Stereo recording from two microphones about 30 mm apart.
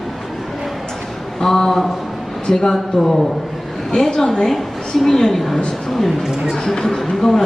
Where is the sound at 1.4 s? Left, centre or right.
Centre.